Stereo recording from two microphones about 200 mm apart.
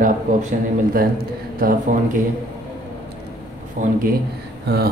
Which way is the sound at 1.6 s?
45° right (ahead or behind).